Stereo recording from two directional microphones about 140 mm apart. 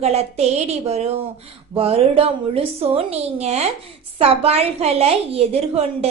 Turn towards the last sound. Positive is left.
turn(degrees=-45)  # may be behind; listen again after turning